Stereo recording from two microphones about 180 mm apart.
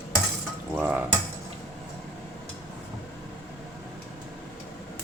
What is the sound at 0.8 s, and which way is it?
Speech, 5° right (ahead or behind).